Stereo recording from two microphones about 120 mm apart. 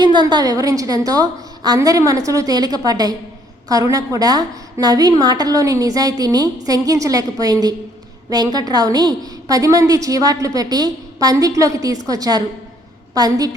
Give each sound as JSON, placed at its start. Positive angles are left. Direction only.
{"t": 0.0, "sound": "a woman's voice", "side_deg": -40}